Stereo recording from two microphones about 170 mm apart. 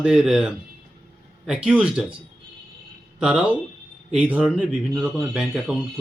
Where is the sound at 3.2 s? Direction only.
5° right (ahead or behind).